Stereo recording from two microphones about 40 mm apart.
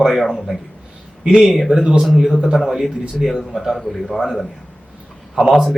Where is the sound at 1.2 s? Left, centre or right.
Centre.